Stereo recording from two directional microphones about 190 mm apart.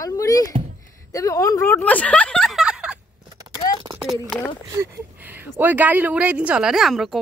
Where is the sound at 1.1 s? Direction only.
15° left (ahead or behind); by 3.0 s 5° right (ahead or behind).